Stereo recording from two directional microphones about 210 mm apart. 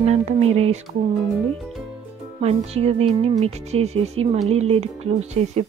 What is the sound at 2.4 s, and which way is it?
Speech, 30° right (ahead or behind).